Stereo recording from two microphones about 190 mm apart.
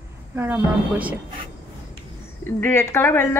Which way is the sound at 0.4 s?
10° right (ahead or behind).